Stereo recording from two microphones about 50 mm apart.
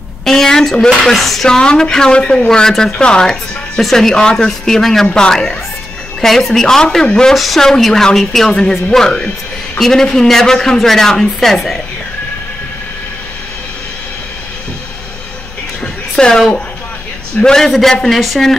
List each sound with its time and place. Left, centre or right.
0.2 s speech: centre
1.6 s speech: centre
7.3 s a woman's voice: centre
15.8 s music: centre
17.4 s speech: centre
17.6 s a woman's voice: centre